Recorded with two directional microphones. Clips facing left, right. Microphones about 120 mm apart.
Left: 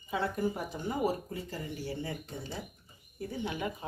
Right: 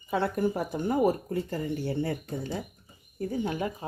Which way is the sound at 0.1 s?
65° right (ahead or behind).